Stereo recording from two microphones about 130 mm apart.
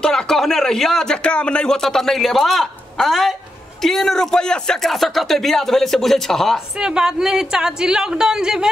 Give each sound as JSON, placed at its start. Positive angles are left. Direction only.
{"t": 0.0, "sound": "speech", "side_deg": 5}